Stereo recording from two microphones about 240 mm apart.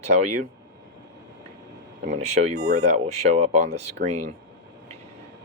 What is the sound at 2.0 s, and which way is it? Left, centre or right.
Speech, right.